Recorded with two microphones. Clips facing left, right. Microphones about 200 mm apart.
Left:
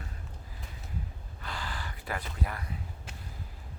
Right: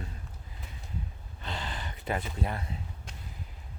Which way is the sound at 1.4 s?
25° right (ahead or behind).